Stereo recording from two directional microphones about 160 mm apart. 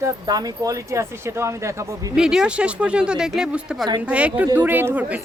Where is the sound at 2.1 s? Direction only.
5° right (ahead or behind).